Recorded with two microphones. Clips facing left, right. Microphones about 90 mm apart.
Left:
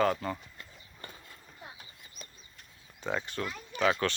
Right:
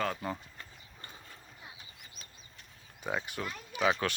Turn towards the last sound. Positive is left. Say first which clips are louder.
# left 2 dB
turn(degrees=-10)  # may be behind; listen again after turning